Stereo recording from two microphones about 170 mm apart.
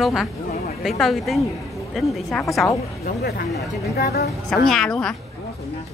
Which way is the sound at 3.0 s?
65° left (ahead or behind).